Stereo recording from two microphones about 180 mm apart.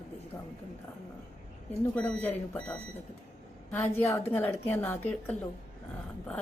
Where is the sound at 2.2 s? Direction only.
10° left (ahead or behind).